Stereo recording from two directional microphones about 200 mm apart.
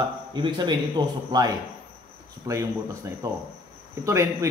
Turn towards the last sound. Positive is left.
turn(degrees=-15)  # may be behind; listen again after turning